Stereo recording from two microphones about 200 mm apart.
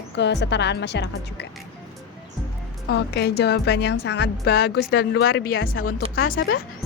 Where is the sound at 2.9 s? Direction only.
55° left (ahead or behind).